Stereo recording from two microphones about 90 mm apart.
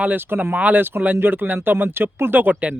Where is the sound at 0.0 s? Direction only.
20° right (ahead or behind).